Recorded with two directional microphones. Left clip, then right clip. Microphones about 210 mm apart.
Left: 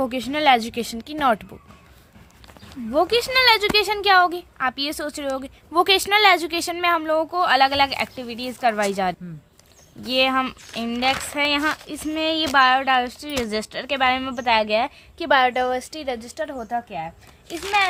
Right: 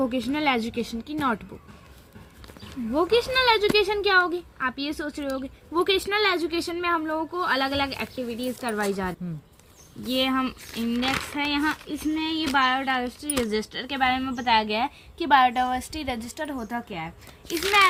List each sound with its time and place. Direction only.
0.1 s speech: 55° left (ahead or behind)
3.1 s a woman's voice: 55° left (ahead or behind); by 17.1 s 10° left (ahead or behind)